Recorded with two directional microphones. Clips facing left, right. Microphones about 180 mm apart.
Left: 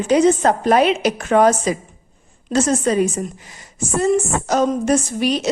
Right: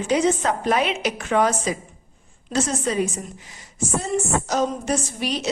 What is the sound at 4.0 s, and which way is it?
A woman's voice, 55° left (ahead or behind).